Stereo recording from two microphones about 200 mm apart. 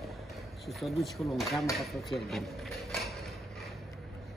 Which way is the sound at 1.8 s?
Centre (ahead or behind).